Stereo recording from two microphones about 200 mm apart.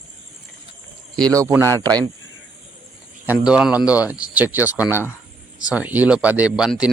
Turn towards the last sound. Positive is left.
turn(degrees=-5)  # may be behind; listen again after turning